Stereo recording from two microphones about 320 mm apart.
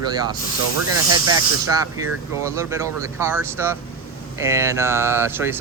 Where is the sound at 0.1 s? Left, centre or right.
Centre.